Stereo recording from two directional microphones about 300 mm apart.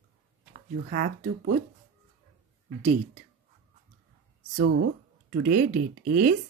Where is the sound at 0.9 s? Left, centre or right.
Right.